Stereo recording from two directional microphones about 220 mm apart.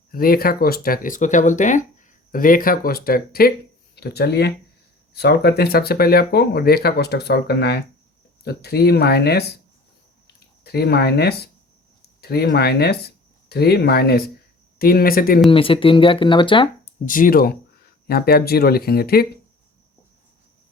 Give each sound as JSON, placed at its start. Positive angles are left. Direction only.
{"t": 0.1, "sound": "speech", "side_deg": 40}
{"t": 10.6, "sound": "speech", "side_deg": 45}
{"t": 15.4, "sound": "speech", "side_deg": 25}
{"t": 17.1, "sound": "speech", "side_deg": 40}